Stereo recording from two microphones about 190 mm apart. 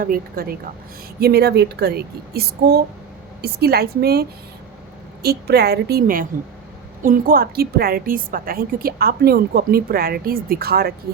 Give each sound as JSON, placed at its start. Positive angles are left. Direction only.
{"t": 0.0, "sound": "a woman's voice", "side_deg": -50}